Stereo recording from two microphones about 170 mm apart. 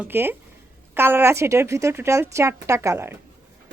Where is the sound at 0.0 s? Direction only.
10° right (ahead or behind).